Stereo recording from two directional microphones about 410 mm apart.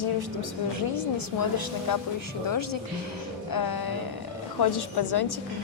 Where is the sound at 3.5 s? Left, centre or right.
Left.